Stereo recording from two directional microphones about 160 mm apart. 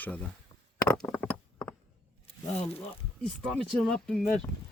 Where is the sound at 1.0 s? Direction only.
5° left (ahead or behind).